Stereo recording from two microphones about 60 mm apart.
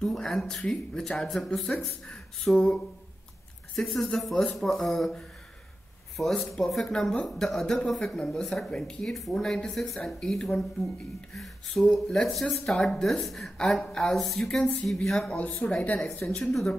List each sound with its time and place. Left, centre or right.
0.0 s speech: centre
6.1 s speech: centre
11.9 s speech: centre
14.6 s speech: left
14.9 s speech: centre
15.3 s speech: left